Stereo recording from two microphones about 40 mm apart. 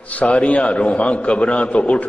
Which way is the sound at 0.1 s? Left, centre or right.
Left.